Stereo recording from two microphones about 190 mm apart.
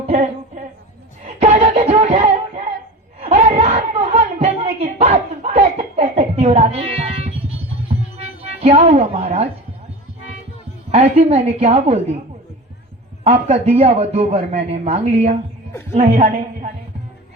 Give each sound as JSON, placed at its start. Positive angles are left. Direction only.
{"t": 0.0, "sound": "music", "side_deg": -30}
{"t": 3.3, "sound": "a sound", "side_deg": -40}
{"t": 8.6, "sound": "a woman's voice", "side_deg": -35}
{"t": 10.9, "sound": "speech", "side_deg": -35}
{"t": 13.2, "sound": "speech", "side_deg": -30}